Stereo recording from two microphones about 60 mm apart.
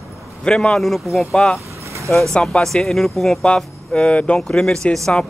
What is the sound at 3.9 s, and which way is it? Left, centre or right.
Speech, centre.